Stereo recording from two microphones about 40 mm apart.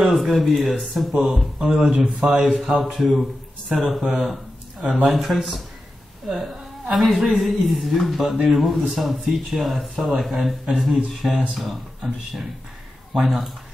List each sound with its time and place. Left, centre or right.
0.0 s speech: centre
1.1 s speech: centre
1.6 s a man's voice: right
2.1 s speech: centre
4.0 s a sound: centre
5.0 s a woman's voice: centre